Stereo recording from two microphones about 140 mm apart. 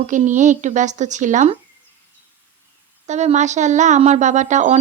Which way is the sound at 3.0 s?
55° right (ahead or behind).